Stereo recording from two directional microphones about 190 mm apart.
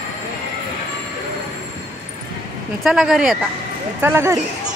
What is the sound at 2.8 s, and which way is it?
Speech, centre (ahead or behind).